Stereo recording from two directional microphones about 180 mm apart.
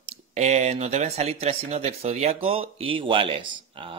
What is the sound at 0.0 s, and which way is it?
Speech, 40° right (ahead or behind).